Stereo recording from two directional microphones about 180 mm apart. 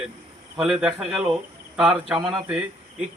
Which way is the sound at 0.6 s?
Centre (ahead or behind).